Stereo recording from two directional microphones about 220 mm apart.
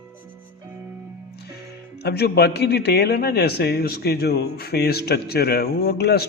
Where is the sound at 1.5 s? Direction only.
50° left (ahead or behind).